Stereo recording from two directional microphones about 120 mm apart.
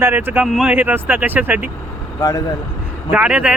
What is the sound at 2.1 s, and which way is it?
Speech, 30° left (ahead or behind).